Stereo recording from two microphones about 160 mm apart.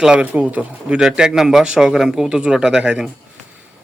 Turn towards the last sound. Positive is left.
turn(degrees=-5)  # may be behind; listen again after turning